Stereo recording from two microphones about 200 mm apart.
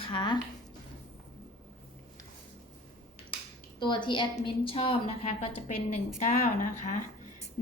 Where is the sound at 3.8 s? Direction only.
25° left (ahead or behind).